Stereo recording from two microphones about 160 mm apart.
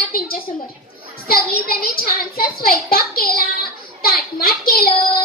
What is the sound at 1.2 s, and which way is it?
A child's voice, 70° left (ahead or behind).